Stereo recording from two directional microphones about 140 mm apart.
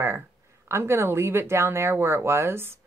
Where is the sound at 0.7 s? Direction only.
20° right (ahead or behind).